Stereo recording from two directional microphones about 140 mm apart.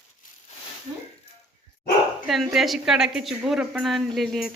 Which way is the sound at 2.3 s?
Centre (ahead or behind).